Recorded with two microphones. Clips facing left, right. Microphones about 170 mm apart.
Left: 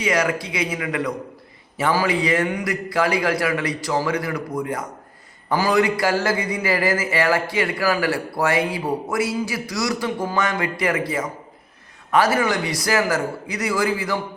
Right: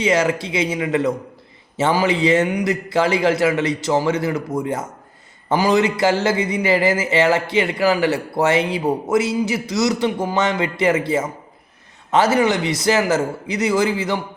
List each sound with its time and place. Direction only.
0.0 s a man's voice: 25° right (ahead or behind)